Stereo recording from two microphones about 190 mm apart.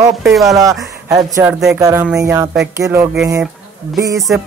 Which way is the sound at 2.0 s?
5° right (ahead or behind).